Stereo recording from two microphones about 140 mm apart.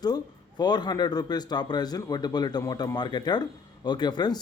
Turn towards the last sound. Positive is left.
turn(degrees=30)  # may be behind; listen again after turning